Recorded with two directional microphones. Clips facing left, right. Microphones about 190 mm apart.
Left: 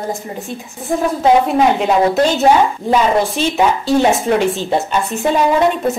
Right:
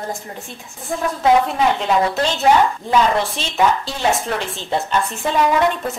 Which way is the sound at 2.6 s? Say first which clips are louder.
Left 2 dB; 15° left (ahead or behind).